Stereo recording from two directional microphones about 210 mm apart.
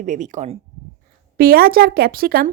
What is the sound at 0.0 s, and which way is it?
Speech, 35° right (ahead or behind).